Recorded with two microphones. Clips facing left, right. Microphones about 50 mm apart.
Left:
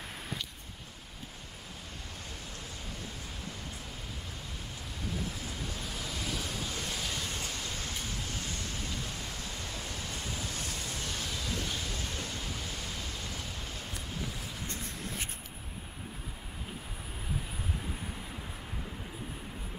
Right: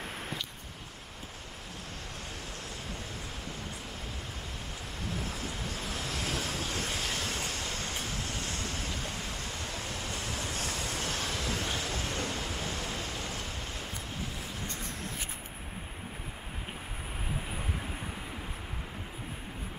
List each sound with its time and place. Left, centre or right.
5.7 s vehicle: right
8.0 s a sound: right
9.5 s vehicle: centre
10.1 s vehicle: right
11.6 s train: right
12.0 s vehicle: right
12.4 s pink noise: right
13.3 s vehicle: right